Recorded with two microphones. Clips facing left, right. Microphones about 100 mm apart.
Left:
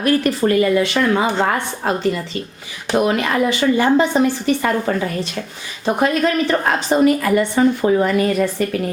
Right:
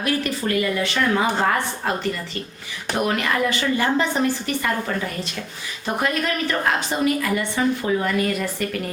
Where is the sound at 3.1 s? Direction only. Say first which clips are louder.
Left 4 dB; 25° left (ahead or behind).